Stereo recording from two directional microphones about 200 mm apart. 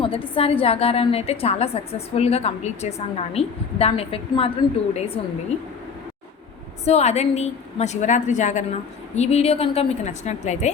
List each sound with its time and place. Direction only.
0.0 s a woman's voice: 30° left (ahead or behind)
6.8 s a woman's voice: 30° left (ahead or behind)